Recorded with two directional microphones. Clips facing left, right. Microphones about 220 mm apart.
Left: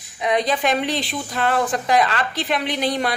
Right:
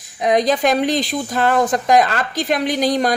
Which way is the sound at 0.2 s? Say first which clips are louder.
Right 5 dB; 45° right (ahead or behind).